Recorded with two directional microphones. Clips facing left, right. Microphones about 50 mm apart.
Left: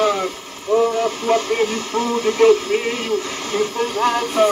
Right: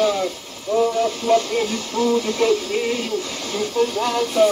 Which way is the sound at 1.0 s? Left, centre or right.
Left.